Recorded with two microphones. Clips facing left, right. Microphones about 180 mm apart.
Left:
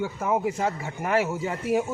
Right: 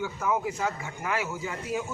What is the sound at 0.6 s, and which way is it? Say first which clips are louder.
Speech: left 4 dB; 35° left (ahead or behind).